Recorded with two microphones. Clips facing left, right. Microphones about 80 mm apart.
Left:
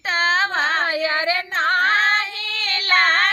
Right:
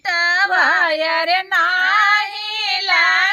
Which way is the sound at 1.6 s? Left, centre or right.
Left.